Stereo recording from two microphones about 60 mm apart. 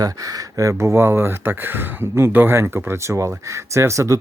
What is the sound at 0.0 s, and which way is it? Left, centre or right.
Speech, right.